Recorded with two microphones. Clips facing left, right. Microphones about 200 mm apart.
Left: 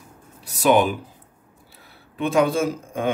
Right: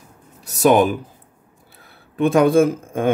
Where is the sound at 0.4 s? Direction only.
45° right (ahead or behind).